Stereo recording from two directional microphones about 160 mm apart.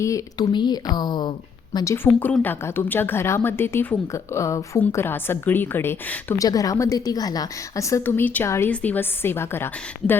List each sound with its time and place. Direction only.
0.0 s speech: 25° left (ahead or behind)